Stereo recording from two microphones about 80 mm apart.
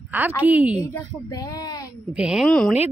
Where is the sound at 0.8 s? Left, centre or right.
Left.